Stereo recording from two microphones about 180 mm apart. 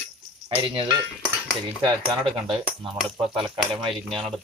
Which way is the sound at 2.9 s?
5° right (ahead or behind).